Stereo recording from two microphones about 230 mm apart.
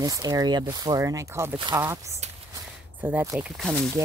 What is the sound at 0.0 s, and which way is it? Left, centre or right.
Speech, centre.